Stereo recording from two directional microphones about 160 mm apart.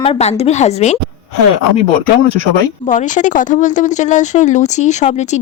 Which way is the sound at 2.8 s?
50° left (ahead or behind).